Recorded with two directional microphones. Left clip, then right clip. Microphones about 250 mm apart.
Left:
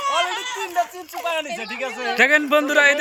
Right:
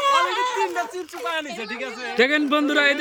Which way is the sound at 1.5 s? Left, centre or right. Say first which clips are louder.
Left 3 dB; centre.